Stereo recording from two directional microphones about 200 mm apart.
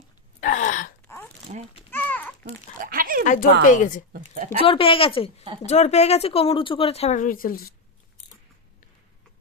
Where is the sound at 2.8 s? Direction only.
45° right (ahead or behind).